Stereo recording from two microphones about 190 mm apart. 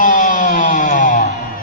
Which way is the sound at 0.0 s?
45° left (ahead or behind).